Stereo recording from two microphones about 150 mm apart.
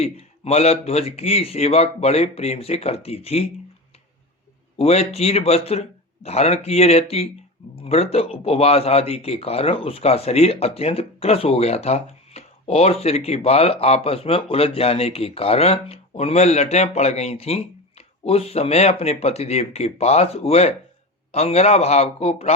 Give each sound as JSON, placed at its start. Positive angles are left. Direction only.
{"t": 0.0, "sound": "speech", "side_deg": 45}
{"t": 4.8, "sound": "speech", "side_deg": 45}